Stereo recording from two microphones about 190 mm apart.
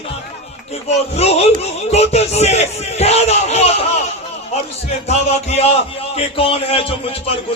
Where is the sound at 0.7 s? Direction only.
35° left (ahead or behind).